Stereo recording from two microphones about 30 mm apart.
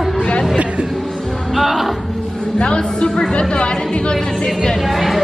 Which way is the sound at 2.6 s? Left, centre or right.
Left.